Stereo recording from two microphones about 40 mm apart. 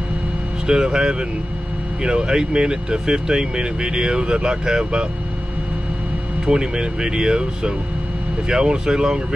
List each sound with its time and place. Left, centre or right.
0.7 s speech: centre
6.4 s speech: right